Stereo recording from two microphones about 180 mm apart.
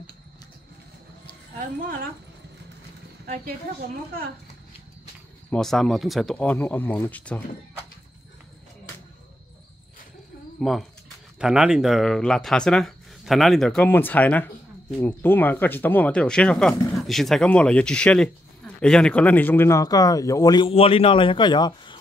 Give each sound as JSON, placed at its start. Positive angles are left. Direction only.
{"t": 5.5, "sound": "speech", "side_deg": 0}
{"t": 10.6, "sound": "speech", "side_deg": 0}